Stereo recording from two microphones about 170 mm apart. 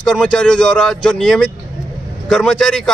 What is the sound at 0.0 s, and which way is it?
Speech, 5° left (ahead or behind).